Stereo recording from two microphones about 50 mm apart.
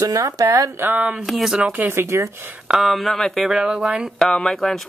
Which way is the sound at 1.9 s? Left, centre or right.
Right.